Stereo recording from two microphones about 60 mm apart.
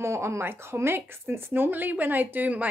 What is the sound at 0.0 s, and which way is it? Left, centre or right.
Speech, right.